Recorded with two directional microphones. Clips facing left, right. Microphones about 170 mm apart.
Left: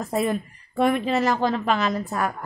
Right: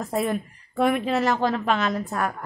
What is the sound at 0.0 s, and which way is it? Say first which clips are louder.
A woman's voice: left 1 dB; centre (ahead or behind).